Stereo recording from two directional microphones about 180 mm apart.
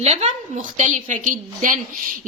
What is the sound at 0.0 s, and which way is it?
A woman's voice, 35° right (ahead or behind).